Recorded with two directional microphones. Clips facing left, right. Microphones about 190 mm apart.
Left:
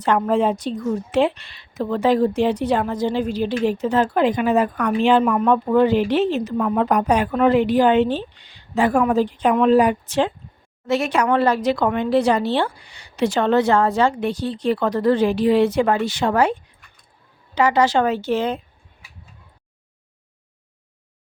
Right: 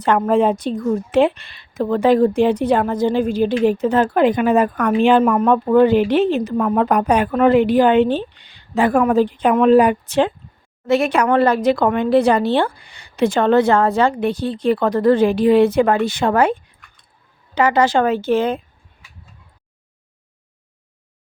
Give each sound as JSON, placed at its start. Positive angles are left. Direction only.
{"t": 0.0, "sound": "speech", "side_deg": -55}